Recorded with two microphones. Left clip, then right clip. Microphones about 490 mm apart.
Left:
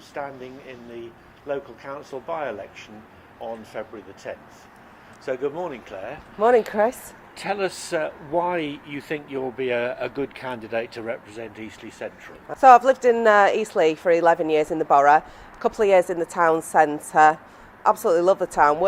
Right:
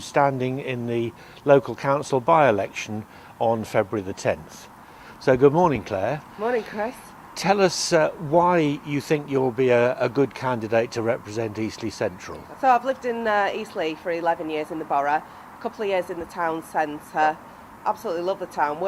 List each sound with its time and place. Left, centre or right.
0.1 s speech: right
6.4 s speech: left
7.3 s speech: right
12.5 s speech: left